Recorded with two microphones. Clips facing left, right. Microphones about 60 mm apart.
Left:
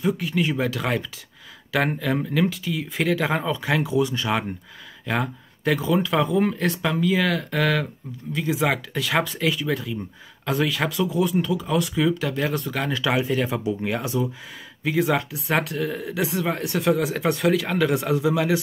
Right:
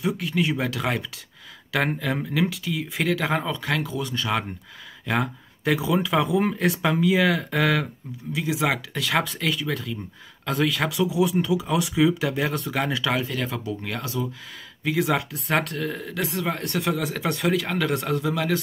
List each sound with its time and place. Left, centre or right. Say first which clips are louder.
0.0 s speech: left 1 dB; centre
13.2 s speech: left 5 dB; centre
14.8 s speech: left 1 dB; centre